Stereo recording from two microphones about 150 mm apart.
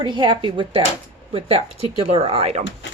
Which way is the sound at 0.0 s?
30° right (ahead or behind).